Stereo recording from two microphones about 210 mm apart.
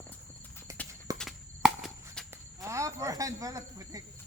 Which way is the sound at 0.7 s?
15° right (ahead or behind).